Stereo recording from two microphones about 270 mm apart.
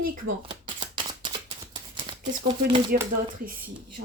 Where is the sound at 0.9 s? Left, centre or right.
Centre.